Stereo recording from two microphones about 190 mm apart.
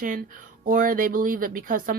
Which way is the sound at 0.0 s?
50° right (ahead or behind).